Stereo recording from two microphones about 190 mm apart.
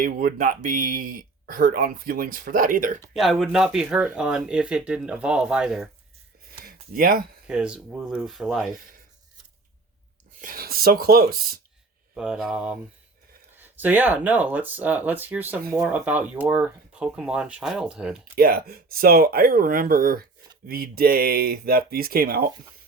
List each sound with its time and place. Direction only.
0.0 s speech: 45° right (ahead or behind)
3.1 s speech: centre (ahead or behind)
6.7 s a sound: 50° right (ahead or behind)
7.4 s speech: 5° right (ahead or behind)
10.4 s speech: 50° right (ahead or behind)
12.1 s speech: 5° right (ahead or behind)
18.3 s speech: 55° right (ahead or behind)